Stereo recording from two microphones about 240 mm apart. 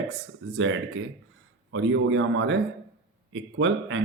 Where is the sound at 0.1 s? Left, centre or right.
Right.